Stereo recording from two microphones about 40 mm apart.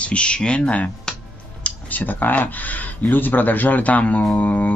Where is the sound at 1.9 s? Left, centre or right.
Left.